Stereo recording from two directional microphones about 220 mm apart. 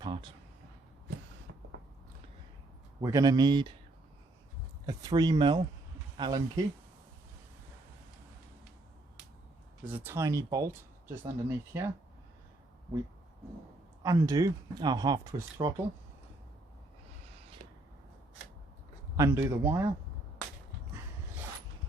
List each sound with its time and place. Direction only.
0.0 s a sound: 20° right (ahead or behind)
3.0 s speech: 15° right (ahead or behind)
4.9 s speech: 15° right (ahead or behind)
9.8 s speech: 10° right (ahead or behind)
14.0 s speech: 15° right (ahead or behind)
17.6 s a sound: 35° right (ahead or behind)
19.1 s speech: 10° right (ahead or behind)